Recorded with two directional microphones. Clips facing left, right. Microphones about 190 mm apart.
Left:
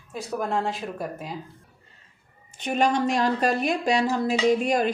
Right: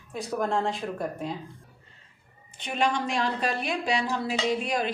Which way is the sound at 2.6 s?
45° left (ahead or behind).